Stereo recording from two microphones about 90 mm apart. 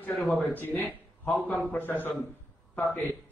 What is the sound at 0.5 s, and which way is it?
A man's voice, 20° left (ahead or behind).